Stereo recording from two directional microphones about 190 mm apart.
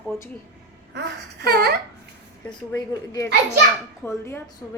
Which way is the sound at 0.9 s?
60° right (ahead or behind).